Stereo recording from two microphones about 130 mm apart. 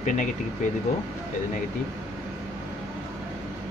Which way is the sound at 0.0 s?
70° left (ahead or behind).